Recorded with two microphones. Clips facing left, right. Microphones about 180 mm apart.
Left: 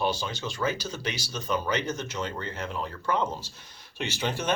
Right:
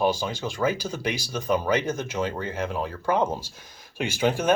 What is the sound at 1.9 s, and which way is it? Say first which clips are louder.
Speech: right 5 dB; 55° right (ahead or behind).